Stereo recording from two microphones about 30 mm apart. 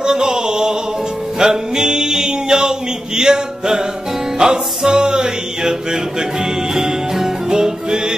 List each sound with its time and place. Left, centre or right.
0.0 s chant: right
1.4 s music: right